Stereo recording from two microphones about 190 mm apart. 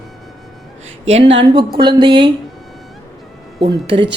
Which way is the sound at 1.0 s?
35° right (ahead or behind).